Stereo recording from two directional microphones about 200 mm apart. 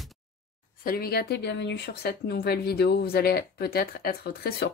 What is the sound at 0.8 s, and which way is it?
Speech, 50° left (ahead or behind).